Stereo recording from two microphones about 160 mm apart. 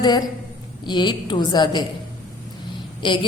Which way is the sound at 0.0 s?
25° left (ahead or behind).